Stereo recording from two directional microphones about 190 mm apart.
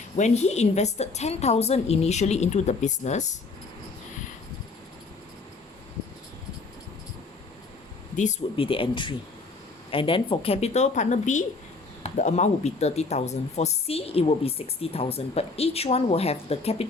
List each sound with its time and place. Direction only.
0.2 s speech: 35° left (ahead or behind)
8.1 s speech: 40° left (ahead or behind)